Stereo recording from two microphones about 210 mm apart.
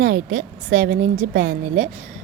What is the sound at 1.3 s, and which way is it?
Speech, 75° right (ahead or behind).